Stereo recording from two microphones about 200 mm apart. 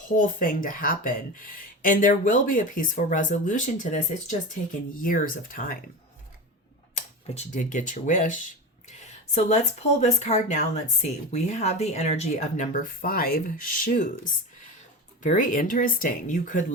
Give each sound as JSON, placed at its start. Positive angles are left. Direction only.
{"t": 0.2, "sound": "speech", "side_deg": 45}
{"t": 6.9, "sound": "speech", "side_deg": 35}
{"t": 15.2, "sound": "speech", "side_deg": 40}